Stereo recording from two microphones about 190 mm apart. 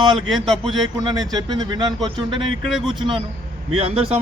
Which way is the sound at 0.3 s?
25° right (ahead or behind).